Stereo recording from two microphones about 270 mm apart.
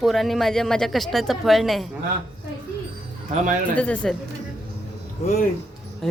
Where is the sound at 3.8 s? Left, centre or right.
Centre.